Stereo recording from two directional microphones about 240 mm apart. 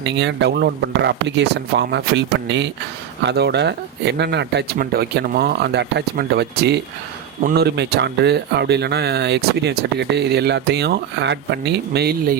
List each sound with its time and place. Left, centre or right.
0.0 s speech: right